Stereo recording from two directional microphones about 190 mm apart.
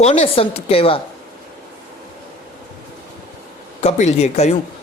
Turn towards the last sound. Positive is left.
turn(degrees=35)  # may be behind; listen again after turning